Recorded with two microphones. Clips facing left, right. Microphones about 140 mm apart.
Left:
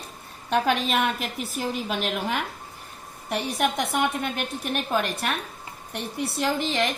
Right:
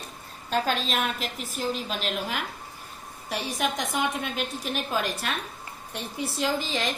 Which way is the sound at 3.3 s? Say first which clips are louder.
Left 3 dB; 60° left (ahead or behind).